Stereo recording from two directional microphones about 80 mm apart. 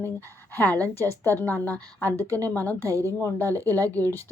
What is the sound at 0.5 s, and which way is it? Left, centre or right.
A woman's voice, left.